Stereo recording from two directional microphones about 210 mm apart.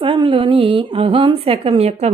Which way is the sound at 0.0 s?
25° right (ahead or behind).